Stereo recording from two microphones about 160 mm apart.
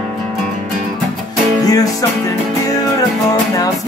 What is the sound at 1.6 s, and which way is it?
Music, 20° left (ahead or behind).